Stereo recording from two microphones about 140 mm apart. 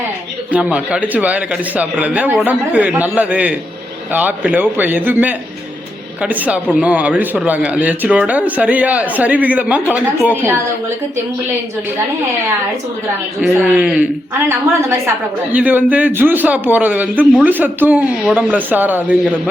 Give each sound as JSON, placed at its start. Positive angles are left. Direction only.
{"t": 0.5, "sound": "speech", "side_deg": -10}
{"t": 13.5, "sound": "speech", "side_deg": -10}
{"t": 14.5, "sound": "a woman's voice", "side_deg": -20}